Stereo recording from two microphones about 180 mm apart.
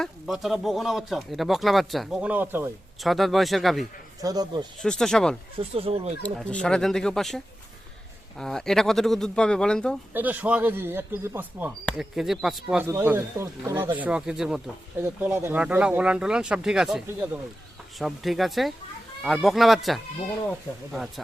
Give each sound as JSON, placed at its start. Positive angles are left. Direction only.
{"t": 0.0, "sound": "speech", "side_deg": 0}
{"t": 3.0, "sound": "speech", "side_deg": 0}
{"t": 4.2, "sound": "speech", "side_deg": -20}
{"t": 4.8, "sound": "speech", "side_deg": 0}
{"t": 5.5, "sound": "speech", "side_deg": -30}
{"t": 6.2, "sound": "speech", "side_deg": 5}
{"t": 10.2, "sound": "speech", "side_deg": -10}
{"t": 15.0, "sound": "speech", "side_deg": -15}
{"t": 20.7, "sound": "speech", "side_deg": 15}